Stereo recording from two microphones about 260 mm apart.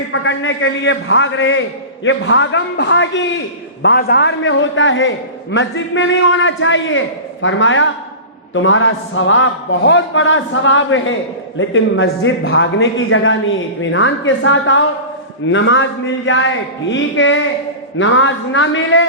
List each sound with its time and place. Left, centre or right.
0.1 s a man's voice: left